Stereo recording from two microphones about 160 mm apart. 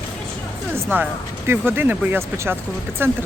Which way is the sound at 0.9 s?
15° right (ahead or behind).